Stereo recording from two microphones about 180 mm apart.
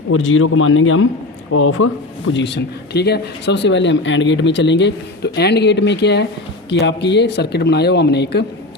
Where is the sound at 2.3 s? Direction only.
75° left (ahead or behind).